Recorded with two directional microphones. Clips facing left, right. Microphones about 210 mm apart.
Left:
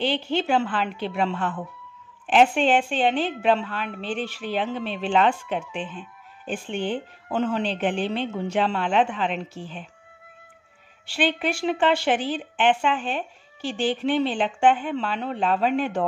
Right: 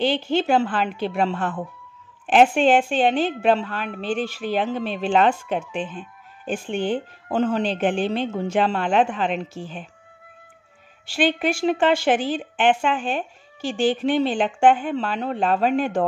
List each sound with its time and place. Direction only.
0.0 s a woman's voice: 45° right (ahead or behind)
11.1 s a woman's voice: 45° right (ahead or behind)